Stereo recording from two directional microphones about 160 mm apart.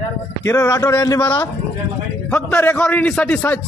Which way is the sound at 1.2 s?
10° left (ahead or behind).